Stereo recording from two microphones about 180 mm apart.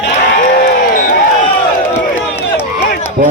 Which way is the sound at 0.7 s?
50° left (ahead or behind).